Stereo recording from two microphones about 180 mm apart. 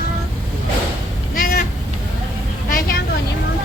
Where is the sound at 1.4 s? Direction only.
50° left (ahead or behind).